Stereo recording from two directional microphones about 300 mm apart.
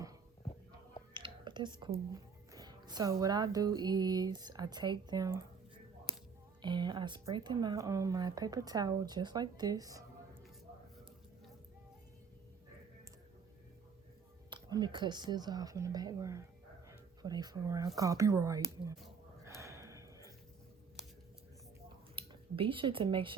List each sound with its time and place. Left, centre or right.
1.1 s speech: centre
6.6 s speech: centre
14.5 s speech: centre
19.0 s a sound: centre
22.1 s speech: centre